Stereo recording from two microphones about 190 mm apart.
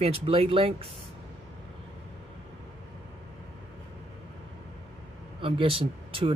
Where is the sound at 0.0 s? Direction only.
30° right (ahead or behind).